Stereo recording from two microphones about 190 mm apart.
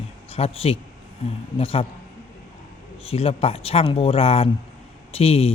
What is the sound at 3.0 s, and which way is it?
Speech, 30° left (ahead or behind).